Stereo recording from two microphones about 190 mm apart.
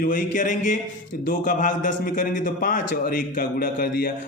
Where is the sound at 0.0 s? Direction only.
45° left (ahead or behind).